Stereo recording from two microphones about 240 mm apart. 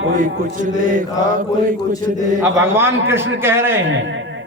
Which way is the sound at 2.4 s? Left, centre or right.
Centre.